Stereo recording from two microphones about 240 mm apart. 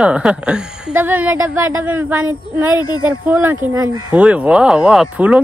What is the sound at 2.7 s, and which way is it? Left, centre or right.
Speech, centre.